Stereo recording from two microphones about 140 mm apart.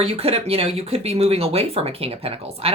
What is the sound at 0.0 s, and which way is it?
Speech, 45° right (ahead or behind).